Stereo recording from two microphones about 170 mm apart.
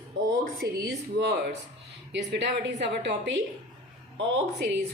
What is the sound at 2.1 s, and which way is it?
A woman's voice, 90° right.